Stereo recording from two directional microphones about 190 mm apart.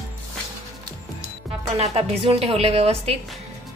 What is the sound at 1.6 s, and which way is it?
Speech, 35° right (ahead or behind).